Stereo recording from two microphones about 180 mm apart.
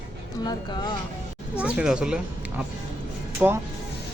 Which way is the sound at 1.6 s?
5° right (ahead or behind).